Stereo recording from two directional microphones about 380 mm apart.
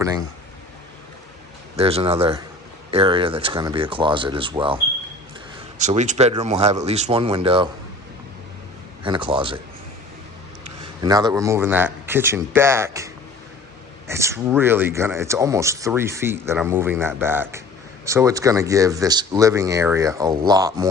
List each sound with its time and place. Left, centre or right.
0.0 s speech: centre
1.7 s speech: centre
5.8 s speech: centre
9.0 s speech: centre
11.0 s speech: centre
14.1 s speech: centre